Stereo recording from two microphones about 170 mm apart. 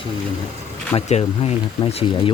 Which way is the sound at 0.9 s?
40° left (ahead or behind).